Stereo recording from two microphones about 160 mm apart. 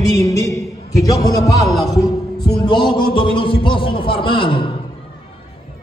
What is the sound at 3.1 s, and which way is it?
A man's voice, 30° left (ahead or behind).